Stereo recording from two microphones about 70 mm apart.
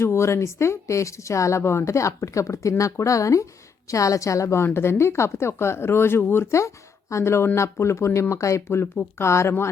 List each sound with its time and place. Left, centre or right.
0.0 s speech: left